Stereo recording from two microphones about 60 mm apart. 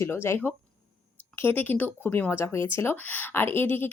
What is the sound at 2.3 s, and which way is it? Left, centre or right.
Speech, left.